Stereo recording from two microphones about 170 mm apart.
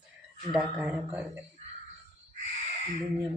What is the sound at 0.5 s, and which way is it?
Speech, 5° right (ahead or behind).